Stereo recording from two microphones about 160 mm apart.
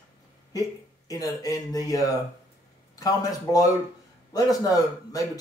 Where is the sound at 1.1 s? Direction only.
20° left (ahead or behind).